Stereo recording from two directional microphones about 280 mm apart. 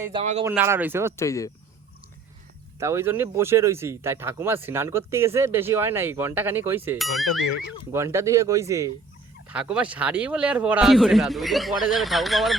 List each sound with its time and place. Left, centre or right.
0.0 s speech: centre
0.4 s speech: centre
1.1 s speech: centre
2.7 s speech: centre